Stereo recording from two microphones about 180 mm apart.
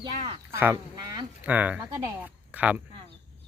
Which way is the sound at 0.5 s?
15° right (ahead or behind).